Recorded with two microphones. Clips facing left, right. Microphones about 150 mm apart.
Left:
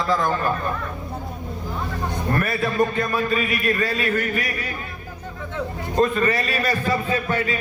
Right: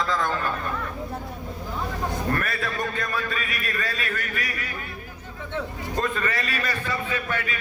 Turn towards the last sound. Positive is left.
turn(degrees=35)  # may be behind; listen again after turning